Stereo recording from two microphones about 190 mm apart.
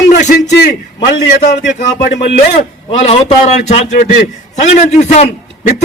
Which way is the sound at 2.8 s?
30° left (ahead or behind).